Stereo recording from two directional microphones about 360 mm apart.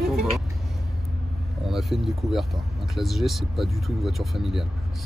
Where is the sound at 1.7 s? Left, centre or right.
Centre.